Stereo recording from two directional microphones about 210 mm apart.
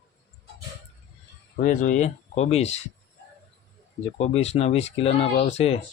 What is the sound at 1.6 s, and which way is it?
Speech, 35° left (ahead or behind).